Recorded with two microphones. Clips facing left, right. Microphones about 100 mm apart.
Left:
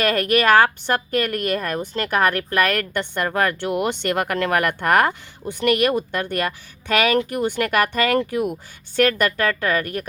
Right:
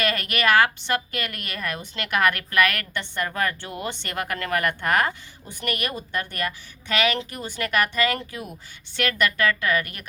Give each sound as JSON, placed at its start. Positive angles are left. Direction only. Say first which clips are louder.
{"t": 0.0, "sound": "a woman's voice", "louder": "left 6 dB", "side_deg": 45}
{"t": 2.9, "sound": "speech", "louder": "left 6 dB", "side_deg": 55}
{"t": 9.0, "sound": "a woman's voice", "louder": "left 5 dB", "side_deg": 45}